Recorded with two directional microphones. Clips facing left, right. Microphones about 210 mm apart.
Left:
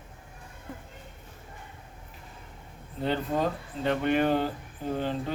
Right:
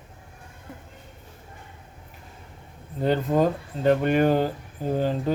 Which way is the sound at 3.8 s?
40° right (ahead or behind).